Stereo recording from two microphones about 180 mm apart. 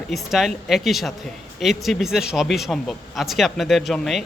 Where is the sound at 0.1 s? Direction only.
Centre (ahead or behind).